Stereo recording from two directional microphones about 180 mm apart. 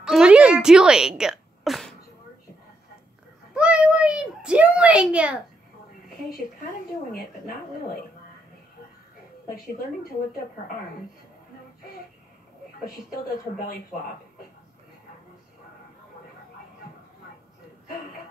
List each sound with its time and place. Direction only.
0.0 s a woman's voice: 5° right (ahead or behind)
3.5 s a child's voice: 5° right (ahead or behind)
7.1 s a woman's voice: 55° left (ahead or behind)